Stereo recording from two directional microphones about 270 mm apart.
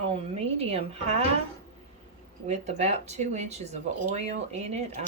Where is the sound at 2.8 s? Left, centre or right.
Right.